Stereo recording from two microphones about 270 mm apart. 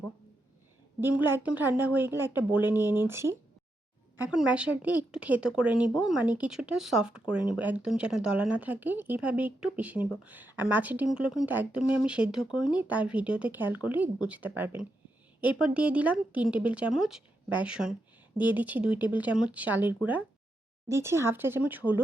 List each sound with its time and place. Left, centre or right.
1.0 s a woman's voice: centre